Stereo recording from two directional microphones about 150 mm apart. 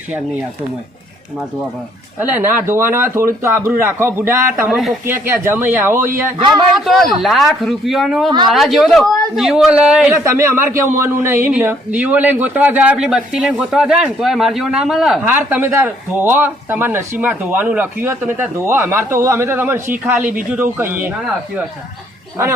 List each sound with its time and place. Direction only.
2.1 s a man's voice: 15° right (ahead or behind)
4.7 s a man's voice: centre (ahead or behind)
5.0 s a man's voice: 15° right (ahead or behind)
6.7 s a man's voice: centre (ahead or behind)
10.2 s a man's voice: 15° right (ahead or behind)